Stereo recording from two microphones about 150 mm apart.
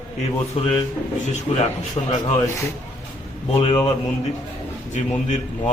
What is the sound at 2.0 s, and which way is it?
Speech, 35° left (ahead or behind).